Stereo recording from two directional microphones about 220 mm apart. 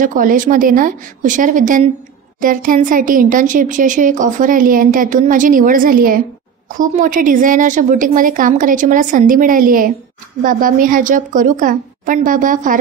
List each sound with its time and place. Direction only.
0.0 s speech: 40° right (ahead or behind)